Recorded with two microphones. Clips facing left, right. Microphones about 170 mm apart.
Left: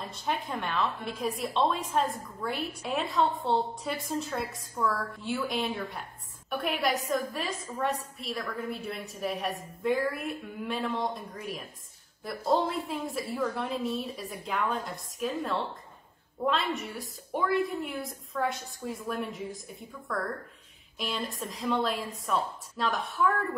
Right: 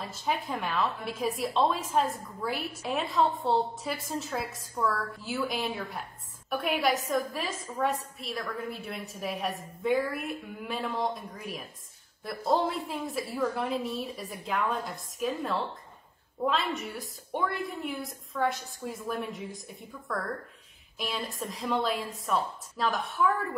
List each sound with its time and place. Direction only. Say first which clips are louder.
0.1 s a woman's voice: right 1 dB; centre (ahead or behind)